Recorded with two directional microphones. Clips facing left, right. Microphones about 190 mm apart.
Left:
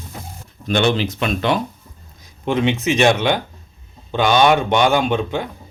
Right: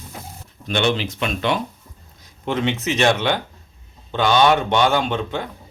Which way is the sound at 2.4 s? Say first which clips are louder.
Left 4 dB; 15° left (ahead or behind).